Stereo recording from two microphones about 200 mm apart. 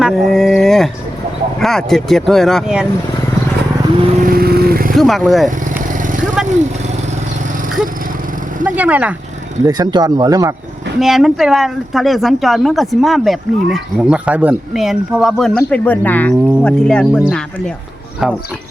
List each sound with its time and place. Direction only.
0.0 s speech: centre (ahead or behind)
4.1 s vehicle: 45° right (ahead or behind)
4.9 s speech: centre (ahead or behind)
5.9 s vehicle: 40° right (ahead or behind)
6.4 s speech: centre (ahead or behind)
8.6 s speech: 5° right (ahead or behind)
9.6 s speech: 20° right (ahead or behind)
11.0 s speech: centre (ahead or behind)